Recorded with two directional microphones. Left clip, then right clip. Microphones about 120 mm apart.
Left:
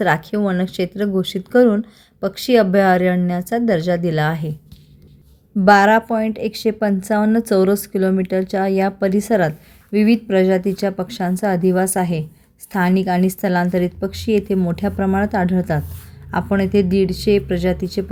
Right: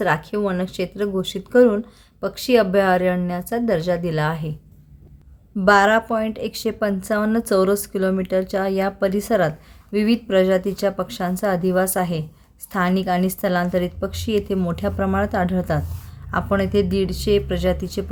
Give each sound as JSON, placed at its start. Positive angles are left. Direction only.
{"t": 0.0, "sound": "a woman's voice", "side_deg": 35}
{"t": 5.5, "sound": "a woman's voice", "side_deg": 25}